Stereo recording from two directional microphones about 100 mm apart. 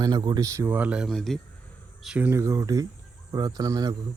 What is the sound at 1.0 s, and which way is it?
Speech, centre (ahead or behind).